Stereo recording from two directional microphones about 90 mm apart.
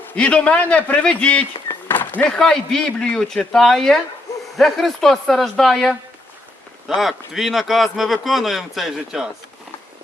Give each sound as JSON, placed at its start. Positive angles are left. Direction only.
{"t": 0.2, "sound": "a man's voice", "side_deg": 10}
{"t": 1.9, "sound": "a sound", "side_deg": 20}
{"t": 2.3, "sound": "speech", "side_deg": 5}